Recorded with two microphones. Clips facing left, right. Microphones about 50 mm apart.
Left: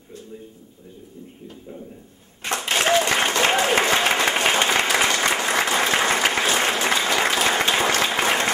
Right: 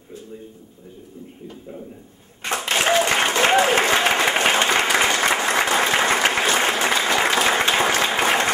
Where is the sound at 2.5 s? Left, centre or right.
Centre.